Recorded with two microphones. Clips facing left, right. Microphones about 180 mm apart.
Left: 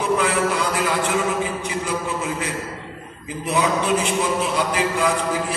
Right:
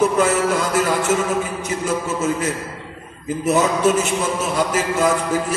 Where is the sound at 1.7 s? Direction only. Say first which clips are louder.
Right 3 dB; 45° right (ahead or behind).